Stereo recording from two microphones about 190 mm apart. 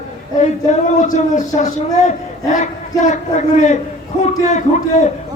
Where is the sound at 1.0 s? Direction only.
40° left (ahead or behind).